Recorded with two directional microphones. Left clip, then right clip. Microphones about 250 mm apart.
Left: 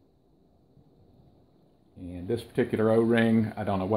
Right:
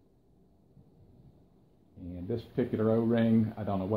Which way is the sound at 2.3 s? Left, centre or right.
Left.